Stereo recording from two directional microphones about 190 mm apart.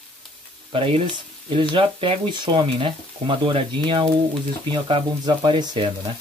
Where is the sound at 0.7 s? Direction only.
25° right (ahead or behind).